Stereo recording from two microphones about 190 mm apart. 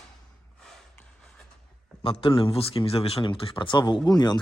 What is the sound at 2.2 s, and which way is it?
Speech, 30° left (ahead or behind).